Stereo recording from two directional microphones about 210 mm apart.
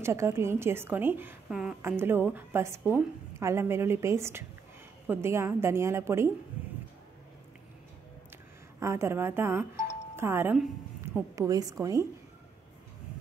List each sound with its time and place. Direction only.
0.0 s a woman's voice: 10° right (ahead or behind)
8.7 s a woman's voice: 15° right (ahead or behind)